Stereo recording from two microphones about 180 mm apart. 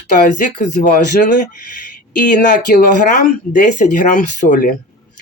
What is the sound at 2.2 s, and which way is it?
Speech, 45° left (ahead or behind).